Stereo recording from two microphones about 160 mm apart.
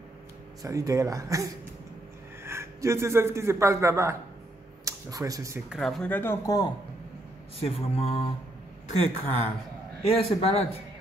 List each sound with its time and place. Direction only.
0.6 s a man's voice: 20° right (ahead or behind)
5.7 s speech: centre (ahead or behind)
6.4 s a man's voice: 20° left (ahead or behind)
7.6 s a sound: 40° left (ahead or behind)